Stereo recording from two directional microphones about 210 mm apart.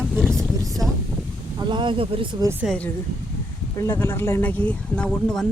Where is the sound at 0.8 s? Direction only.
Centre (ahead or behind).